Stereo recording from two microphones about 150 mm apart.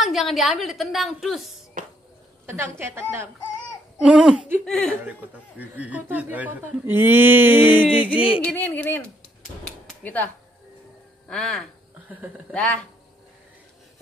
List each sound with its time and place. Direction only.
0.0 s a woman's voice: centre (ahead or behind)
2.4 s a woman's voice: 15° right (ahead or behind)
4.6 s a woman's voice: 5° left (ahead or behind)
5.6 s speech: 10° right (ahead or behind)
8.5 s speech: 10° left (ahead or behind)
10.0 s a woman's voice: 10° left (ahead or behind)